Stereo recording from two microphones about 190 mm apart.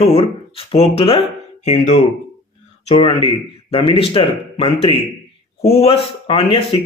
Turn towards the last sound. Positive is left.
turn(degrees=30)  # may be behind; listen again after turning